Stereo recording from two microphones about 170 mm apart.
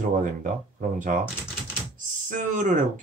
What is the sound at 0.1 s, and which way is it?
Speech, 50° right (ahead or behind).